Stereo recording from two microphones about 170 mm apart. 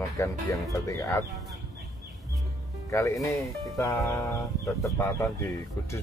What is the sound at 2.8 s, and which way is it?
Speech, 20° left (ahead or behind).